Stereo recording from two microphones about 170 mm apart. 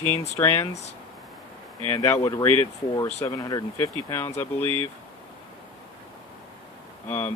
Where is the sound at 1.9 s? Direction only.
20° left (ahead or behind).